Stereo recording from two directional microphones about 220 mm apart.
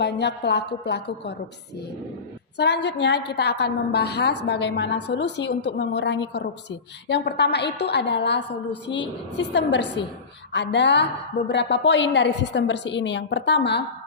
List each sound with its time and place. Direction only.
0.0 s a woman's voice: 50° left (ahead or behind)
2.6 s a woman's voice: 50° left (ahead or behind)